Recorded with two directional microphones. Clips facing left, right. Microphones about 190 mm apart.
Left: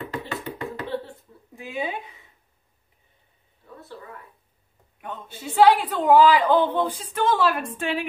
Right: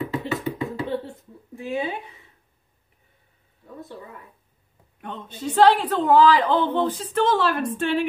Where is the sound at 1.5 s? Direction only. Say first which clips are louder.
Right 3 dB; 15° left (ahead or behind).